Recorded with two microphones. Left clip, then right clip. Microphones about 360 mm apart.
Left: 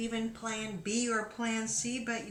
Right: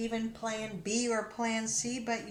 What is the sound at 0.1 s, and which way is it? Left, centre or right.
A woman's voice, centre.